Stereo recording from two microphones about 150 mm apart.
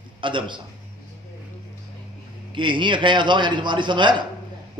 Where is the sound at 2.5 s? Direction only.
30° right (ahead or behind).